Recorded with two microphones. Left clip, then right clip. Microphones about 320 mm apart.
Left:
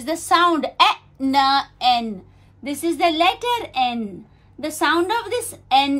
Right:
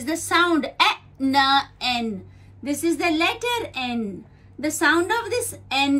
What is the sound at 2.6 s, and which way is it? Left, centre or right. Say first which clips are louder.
A woman's voice: left 3 dB; left.